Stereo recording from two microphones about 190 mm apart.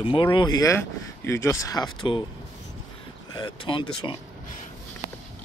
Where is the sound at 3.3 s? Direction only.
25° left (ahead or behind).